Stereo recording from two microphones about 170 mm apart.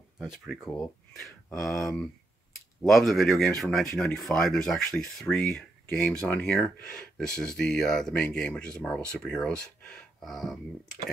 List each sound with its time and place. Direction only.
0.2 s speech: centre (ahead or behind)